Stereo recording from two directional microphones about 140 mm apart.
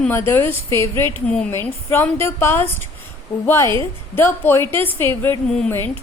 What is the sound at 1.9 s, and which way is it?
A woman's voice, 20° left (ahead or behind).